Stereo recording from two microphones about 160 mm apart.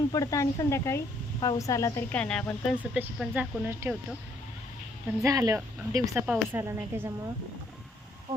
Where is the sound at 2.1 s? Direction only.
5° left (ahead or behind).